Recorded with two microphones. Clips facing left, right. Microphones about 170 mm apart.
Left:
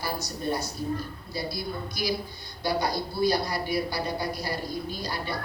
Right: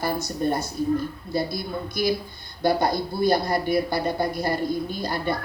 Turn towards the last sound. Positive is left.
turn(degrees=-50)  # may be behind; listen again after turning